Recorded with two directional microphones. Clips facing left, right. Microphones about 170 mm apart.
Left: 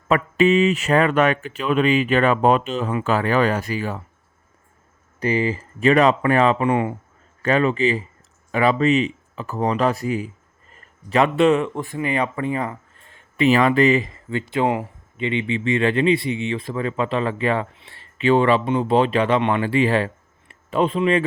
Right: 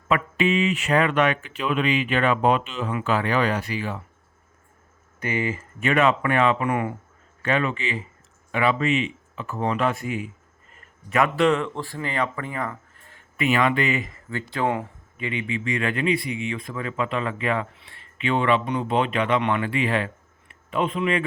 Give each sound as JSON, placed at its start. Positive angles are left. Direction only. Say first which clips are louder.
{"t": 0.1, "sound": "speech", "louder": "left 5 dB", "side_deg": 40}
{"t": 5.2, "sound": "speech", "louder": "left 5 dB", "side_deg": 35}
{"t": 7.4, "sound": "speech", "louder": "left 6 dB", "side_deg": 40}